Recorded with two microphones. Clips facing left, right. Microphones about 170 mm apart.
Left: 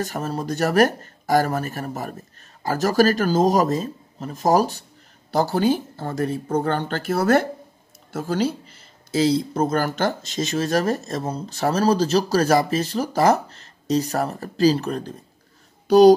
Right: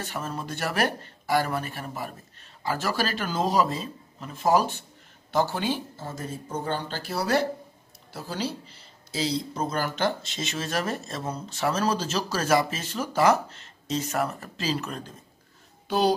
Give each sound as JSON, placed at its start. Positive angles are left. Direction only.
{"t": 0.0, "sound": "speech", "side_deg": 40}
{"t": 5.9, "sound": "speech", "side_deg": 65}